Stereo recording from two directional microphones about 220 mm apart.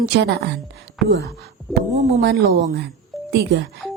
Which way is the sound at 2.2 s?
45° right (ahead or behind).